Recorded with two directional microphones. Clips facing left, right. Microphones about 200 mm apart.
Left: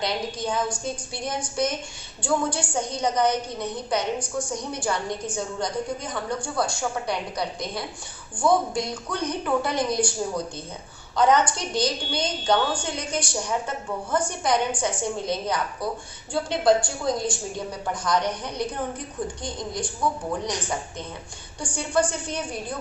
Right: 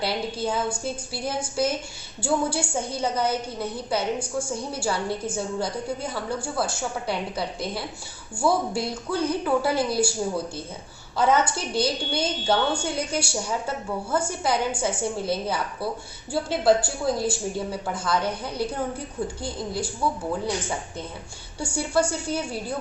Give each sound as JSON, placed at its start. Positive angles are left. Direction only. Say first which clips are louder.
{"t": 0.0, "sound": "a woman's voice", "louder": "right 1 dB", "side_deg": -5}
{"t": 21.6, "sound": "a woman's voice", "louder": "even", "side_deg": -10}